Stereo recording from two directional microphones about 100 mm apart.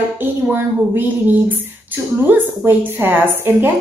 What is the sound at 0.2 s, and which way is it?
A woman's voice, 20° right (ahead or behind).